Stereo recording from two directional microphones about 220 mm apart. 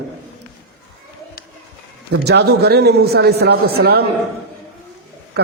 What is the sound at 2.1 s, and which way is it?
A man's voice, 50° right (ahead or behind).